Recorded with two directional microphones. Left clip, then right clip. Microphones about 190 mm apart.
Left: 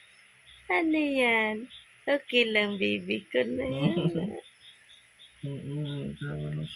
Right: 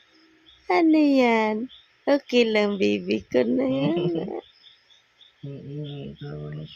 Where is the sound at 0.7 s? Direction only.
45° right (ahead or behind).